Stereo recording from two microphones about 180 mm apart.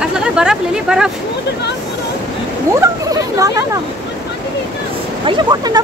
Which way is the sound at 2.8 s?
20° right (ahead or behind).